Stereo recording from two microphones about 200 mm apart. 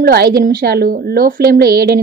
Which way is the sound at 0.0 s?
50° right (ahead or behind).